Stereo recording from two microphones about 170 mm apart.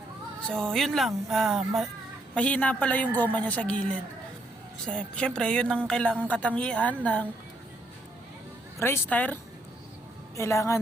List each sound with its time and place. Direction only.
0.4 s a woman's voice: 5° left (ahead or behind)
8.8 s a woman's voice: 10° left (ahead or behind)